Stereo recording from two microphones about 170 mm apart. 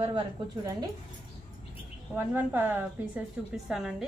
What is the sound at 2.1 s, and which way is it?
A woman's voice, 10° right (ahead or behind).